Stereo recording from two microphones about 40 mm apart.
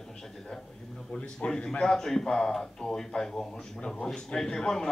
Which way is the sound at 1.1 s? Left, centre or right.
Left.